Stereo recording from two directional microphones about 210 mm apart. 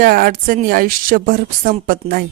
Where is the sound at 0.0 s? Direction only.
45° right (ahead or behind).